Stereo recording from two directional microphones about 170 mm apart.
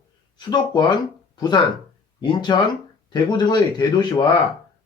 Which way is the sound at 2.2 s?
25° left (ahead or behind).